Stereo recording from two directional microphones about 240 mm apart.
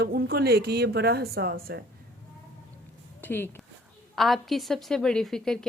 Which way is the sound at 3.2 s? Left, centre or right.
Centre.